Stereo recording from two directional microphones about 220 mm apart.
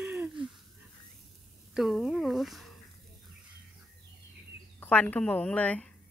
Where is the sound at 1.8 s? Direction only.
Centre (ahead or behind).